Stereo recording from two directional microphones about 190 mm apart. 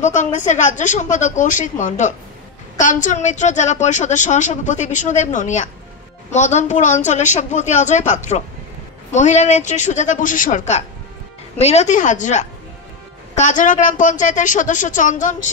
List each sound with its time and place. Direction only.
0.0 s a woman's voice: 40° left (ahead or behind)